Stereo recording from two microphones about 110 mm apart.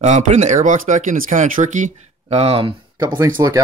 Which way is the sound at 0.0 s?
90° right.